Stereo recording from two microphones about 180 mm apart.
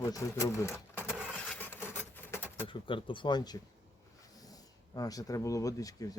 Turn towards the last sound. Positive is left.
turn(degrees=20)  # may be behind; listen again after turning